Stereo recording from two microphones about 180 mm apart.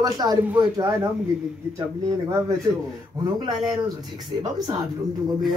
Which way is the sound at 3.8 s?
20° right (ahead or behind).